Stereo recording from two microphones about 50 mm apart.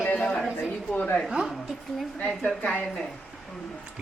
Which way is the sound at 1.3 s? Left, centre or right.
Centre.